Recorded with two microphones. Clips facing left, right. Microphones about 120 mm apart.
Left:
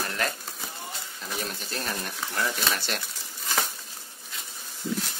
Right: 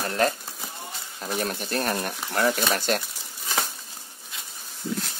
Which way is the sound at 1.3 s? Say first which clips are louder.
Right 7 dB; 50° right (ahead or behind).